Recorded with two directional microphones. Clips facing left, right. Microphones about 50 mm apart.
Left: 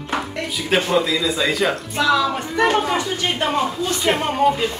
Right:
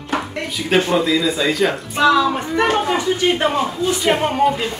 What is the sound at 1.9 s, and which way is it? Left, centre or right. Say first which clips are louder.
Speech: right 5 dB; right.